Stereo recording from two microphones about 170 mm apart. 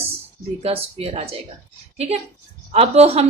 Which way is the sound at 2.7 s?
35° right (ahead or behind).